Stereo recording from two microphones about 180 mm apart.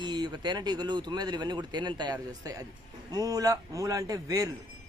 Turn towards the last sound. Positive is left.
turn(degrees=-20)  # may be behind; listen again after turning